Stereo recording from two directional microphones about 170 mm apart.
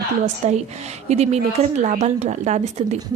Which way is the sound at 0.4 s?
40° right (ahead or behind).